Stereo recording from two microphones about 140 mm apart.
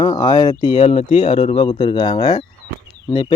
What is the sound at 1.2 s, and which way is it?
Speech, 35° left (ahead or behind).